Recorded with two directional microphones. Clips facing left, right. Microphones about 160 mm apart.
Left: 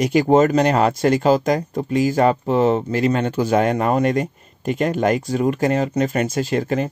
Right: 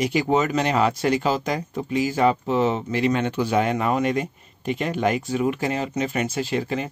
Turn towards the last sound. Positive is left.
turn(degrees=45)  # may be behind; listen again after turning